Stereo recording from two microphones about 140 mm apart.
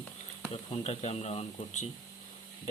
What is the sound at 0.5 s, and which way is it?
Speech, 45° left (ahead or behind).